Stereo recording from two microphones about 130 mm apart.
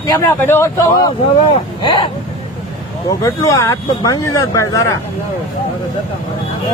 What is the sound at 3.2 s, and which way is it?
Speech, 25° left (ahead or behind).